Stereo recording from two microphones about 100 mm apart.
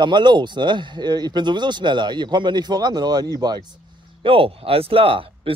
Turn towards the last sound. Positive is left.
turn(degrees=-65)  # may be behind; listen again after turning